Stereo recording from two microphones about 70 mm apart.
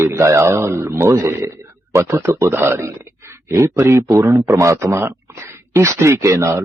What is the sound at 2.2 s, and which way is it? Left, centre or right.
A man's voice, right.